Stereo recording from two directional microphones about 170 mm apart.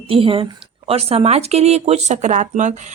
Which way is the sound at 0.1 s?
30° right (ahead or behind).